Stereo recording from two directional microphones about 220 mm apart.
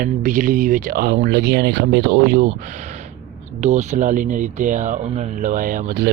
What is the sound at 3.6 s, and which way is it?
Speech, 30° right (ahead or behind).